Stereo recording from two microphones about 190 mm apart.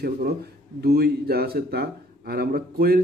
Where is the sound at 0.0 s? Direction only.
55° right (ahead or behind).